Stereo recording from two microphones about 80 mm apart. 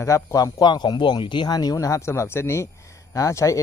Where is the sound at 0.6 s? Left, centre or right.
Left.